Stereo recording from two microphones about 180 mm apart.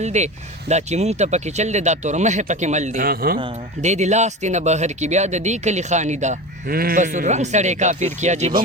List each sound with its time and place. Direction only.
0.0 s speech: 40° right (ahead or behind); by 3.3 s 55° right (ahead or behind)
3.3 s speech: 35° right (ahead or behind)
6.7 s speech: 55° right (ahead or behind)